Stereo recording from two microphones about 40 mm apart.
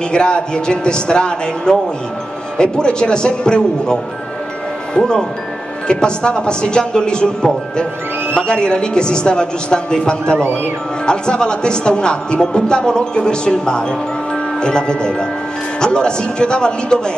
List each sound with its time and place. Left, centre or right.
0.1 s speech: left
8.4 s speech: left